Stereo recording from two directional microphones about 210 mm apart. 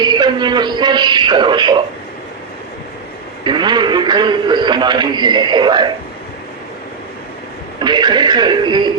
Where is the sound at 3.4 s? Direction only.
20° right (ahead or behind).